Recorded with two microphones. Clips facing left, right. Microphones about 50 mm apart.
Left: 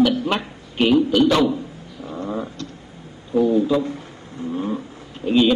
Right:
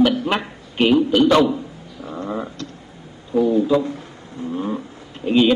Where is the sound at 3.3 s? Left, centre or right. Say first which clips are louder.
Right 1 dB; centre.